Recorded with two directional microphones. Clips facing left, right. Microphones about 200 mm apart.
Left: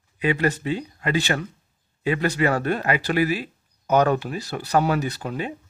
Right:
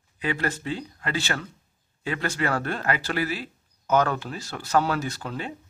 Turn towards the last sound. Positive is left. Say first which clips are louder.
# left 4 dB
turn(degrees=15)  # may be behind; listen again after turning